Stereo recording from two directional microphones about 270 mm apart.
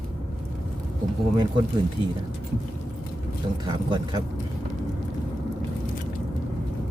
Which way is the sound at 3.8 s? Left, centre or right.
Centre.